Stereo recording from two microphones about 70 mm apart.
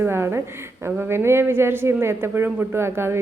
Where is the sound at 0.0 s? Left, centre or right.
Right.